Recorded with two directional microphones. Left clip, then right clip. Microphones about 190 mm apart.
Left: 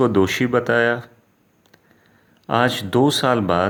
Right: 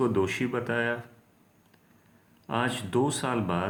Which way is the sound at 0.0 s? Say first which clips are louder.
Left 9 dB; 45° left (ahead or behind).